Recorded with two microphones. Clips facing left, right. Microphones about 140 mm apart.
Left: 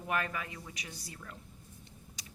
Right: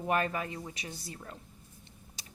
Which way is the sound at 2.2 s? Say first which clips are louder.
Right 1 dB; 25° right (ahead or behind).